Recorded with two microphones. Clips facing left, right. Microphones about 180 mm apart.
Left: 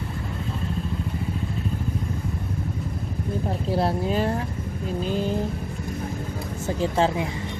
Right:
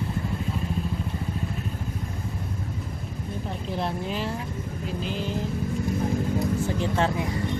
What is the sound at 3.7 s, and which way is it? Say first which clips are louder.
Speech: left 6 dB; 40° left (ahead or behind).